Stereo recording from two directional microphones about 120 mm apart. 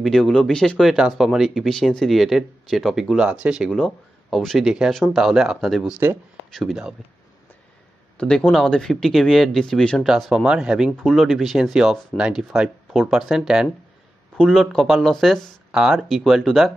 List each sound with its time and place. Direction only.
0.0 s speech: centre (ahead or behind)
8.2 s speech: 5° left (ahead or behind)
10.9 s speech: 5° left (ahead or behind)